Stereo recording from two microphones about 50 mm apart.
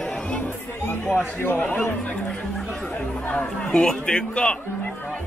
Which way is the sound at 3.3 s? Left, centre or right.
Centre.